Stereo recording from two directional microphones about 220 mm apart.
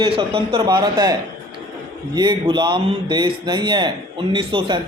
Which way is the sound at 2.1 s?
20° right (ahead or behind).